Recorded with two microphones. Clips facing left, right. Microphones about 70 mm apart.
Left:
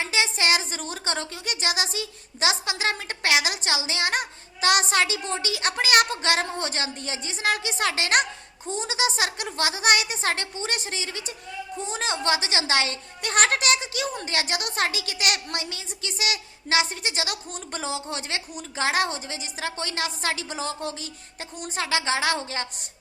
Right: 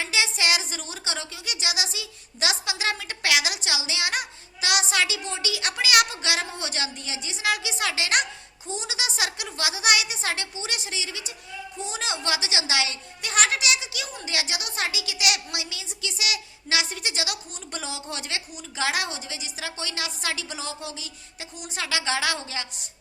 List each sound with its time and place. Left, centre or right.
0.0 s speech: left